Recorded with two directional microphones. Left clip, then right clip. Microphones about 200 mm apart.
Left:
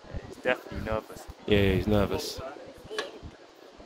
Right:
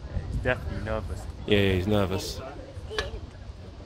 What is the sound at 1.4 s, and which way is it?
Speech, 5° left (ahead or behind).